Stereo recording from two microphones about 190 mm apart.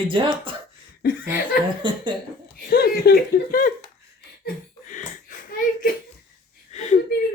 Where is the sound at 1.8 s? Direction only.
25° right (ahead or behind).